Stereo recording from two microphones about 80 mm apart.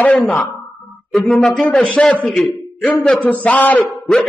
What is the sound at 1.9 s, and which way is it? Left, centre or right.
A man's voice, centre.